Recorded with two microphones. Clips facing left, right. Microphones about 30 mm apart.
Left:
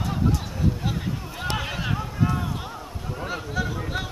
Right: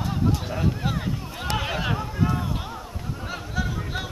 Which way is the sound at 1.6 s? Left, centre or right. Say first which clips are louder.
Right 2 dB; centre.